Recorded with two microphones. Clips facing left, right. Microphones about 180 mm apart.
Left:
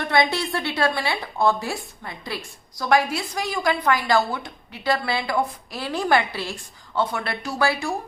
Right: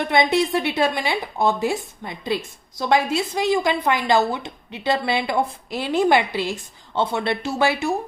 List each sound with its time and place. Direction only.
0.0 s a woman's voice: 20° right (ahead or behind)